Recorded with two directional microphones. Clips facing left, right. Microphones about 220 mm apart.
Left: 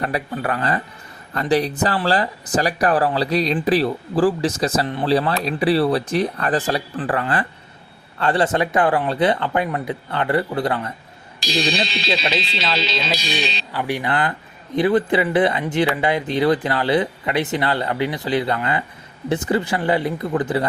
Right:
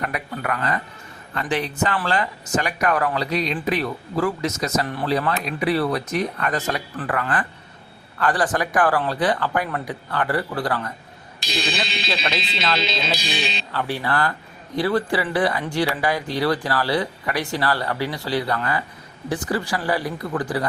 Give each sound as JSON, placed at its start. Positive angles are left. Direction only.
{"t": 0.0, "sound": "speech", "side_deg": 30}
{"t": 11.4, "sound": "speech", "side_deg": 35}
{"t": 13.7, "sound": "speech", "side_deg": 15}